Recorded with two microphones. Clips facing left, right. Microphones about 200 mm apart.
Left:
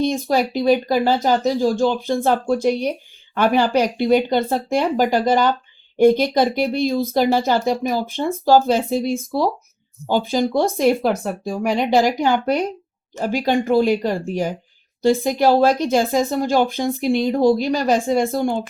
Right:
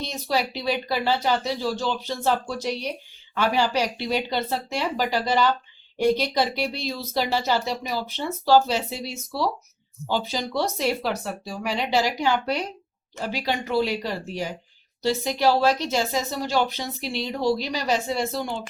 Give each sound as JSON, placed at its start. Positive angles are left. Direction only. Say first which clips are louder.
{"t": 0.0, "sound": "speech", "louder": "left 8 dB", "side_deg": 50}